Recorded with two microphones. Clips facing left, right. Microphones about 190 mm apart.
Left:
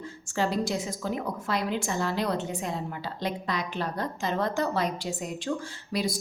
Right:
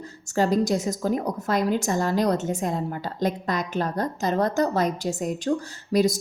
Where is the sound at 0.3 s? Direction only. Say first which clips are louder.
Right 6 dB; 45° right (ahead or behind).